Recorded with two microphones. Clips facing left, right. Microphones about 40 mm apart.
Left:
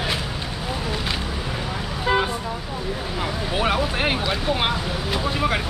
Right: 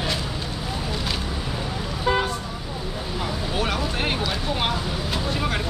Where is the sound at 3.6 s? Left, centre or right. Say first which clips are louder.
Left 5 dB; left.